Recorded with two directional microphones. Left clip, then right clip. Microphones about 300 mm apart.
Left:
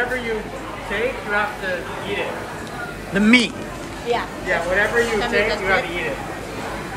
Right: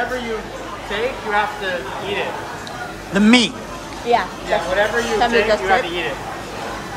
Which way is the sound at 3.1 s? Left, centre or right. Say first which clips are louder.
Right 1 dB; centre.